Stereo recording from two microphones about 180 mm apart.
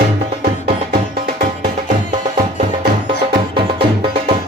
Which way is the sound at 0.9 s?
55° right (ahead or behind).